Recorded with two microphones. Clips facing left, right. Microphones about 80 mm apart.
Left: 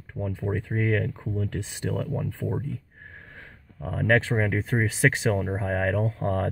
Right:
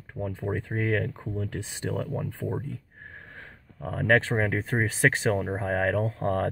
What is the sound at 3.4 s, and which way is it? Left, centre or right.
Speech, right.